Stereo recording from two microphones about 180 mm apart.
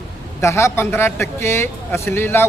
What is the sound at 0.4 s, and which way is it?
Speech, 15° left (ahead or behind).